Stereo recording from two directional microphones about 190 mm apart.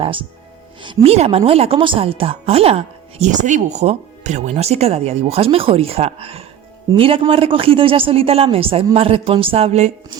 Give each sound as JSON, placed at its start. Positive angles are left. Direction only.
{"t": 0.8, "sound": "a woman's voice", "side_deg": -25}